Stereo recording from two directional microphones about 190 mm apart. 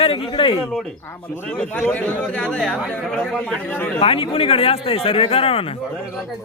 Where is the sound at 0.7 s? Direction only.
5° left (ahead or behind).